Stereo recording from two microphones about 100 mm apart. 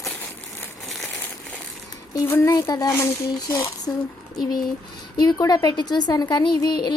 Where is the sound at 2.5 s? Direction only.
40° left (ahead or behind).